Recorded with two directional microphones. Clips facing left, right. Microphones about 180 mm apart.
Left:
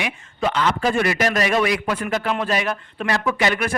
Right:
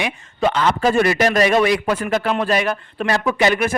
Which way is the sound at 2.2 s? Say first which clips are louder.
Right 3 dB; 50° right (ahead or behind).